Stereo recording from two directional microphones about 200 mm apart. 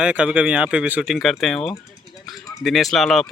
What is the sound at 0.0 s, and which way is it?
Speech, 5° right (ahead or behind).